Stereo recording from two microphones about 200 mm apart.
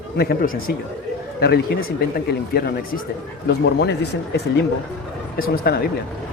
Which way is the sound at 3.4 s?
60° left (ahead or behind).